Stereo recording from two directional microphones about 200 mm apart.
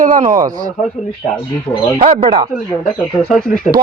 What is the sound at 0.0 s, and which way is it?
Speech, 40° right (ahead or behind).